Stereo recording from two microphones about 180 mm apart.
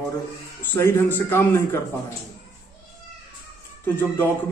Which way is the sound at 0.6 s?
15° left (ahead or behind).